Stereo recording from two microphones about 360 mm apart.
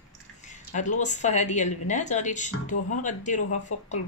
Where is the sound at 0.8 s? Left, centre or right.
Left.